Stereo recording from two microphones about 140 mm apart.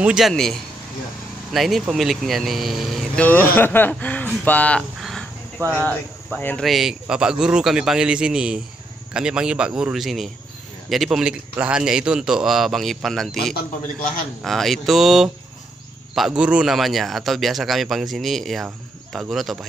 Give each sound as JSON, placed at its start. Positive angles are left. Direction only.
{"t": 0.0, "sound": "speech", "side_deg": -5}
{"t": 3.3, "sound": "speech", "side_deg": 15}